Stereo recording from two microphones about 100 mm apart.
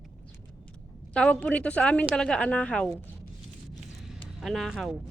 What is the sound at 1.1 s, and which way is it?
Speech, 10° left (ahead or behind).